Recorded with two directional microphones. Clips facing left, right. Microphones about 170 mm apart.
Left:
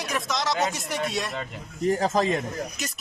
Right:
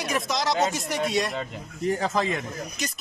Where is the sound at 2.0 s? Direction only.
35° left (ahead or behind).